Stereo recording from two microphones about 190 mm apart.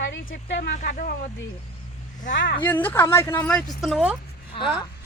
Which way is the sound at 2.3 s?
65° left (ahead or behind).